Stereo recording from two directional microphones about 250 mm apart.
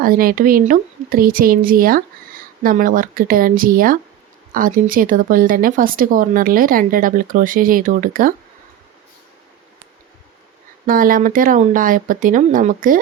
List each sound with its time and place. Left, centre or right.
0.0 s speech: right
10.8 s speech: right